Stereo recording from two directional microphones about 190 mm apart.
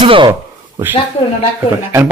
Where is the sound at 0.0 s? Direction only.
25° right (ahead or behind).